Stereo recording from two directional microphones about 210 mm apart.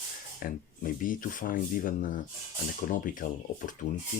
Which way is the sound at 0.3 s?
40° left (ahead or behind).